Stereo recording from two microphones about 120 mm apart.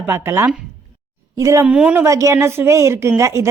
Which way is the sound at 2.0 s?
25° right (ahead or behind).